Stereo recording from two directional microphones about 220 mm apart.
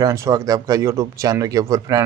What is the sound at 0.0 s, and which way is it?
Speech, 15° right (ahead or behind).